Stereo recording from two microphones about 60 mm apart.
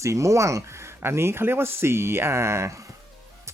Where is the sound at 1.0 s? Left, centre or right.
Right.